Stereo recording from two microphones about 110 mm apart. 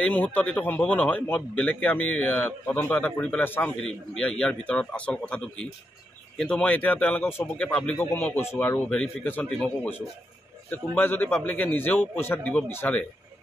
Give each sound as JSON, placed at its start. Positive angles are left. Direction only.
{"t": 0.0, "sound": "a man's voice", "side_deg": 15}
{"t": 3.7, "sound": "a man's voice", "side_deg": 5}
{"t": 8.0, "sound": "a man's voice", "side_deg": 20}